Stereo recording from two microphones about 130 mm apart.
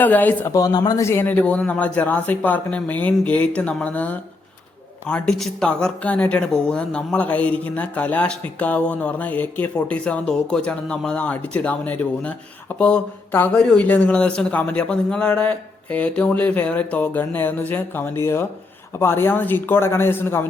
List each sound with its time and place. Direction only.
0.0 s speech: 15° left (ahead or behind)
0.5 s speech: 30° left (ahead or behind)